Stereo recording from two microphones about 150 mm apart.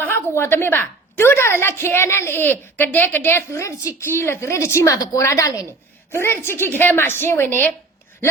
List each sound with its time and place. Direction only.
0.0 s a woman's voice: 15° left (ahead or behind)